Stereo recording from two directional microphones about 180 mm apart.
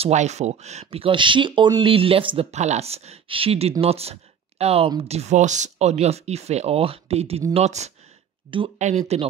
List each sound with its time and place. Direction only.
0.0 s speech: 40° right (ahead or behind)
8.5 s speech: 30° right (ahead or behind)
8.7 s speech: 40° right (ahead or behind)